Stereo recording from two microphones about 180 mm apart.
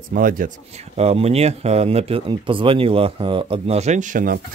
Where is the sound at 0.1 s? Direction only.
50° right (ahead or behind).